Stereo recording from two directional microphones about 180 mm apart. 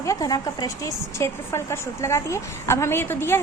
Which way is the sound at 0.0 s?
20° left (ahead or behind).